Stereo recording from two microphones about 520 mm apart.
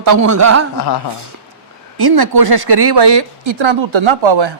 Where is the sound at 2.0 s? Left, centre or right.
Right.